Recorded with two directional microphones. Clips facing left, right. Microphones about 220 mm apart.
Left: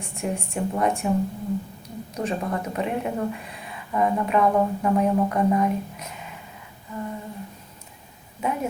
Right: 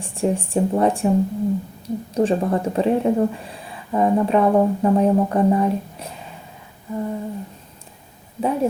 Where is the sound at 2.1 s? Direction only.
30° right (ahead or behind).